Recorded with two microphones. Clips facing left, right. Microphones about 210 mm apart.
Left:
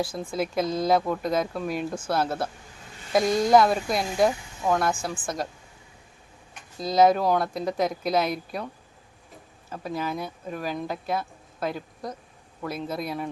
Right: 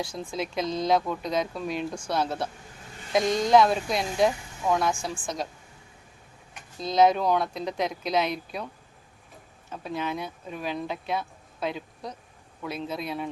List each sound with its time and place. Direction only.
0.0 s speech: 5° left (ahead or behind)
6.5 s speech: 5° left (ahead or behind)
9.6 s speech: 5° left (ahead or behind)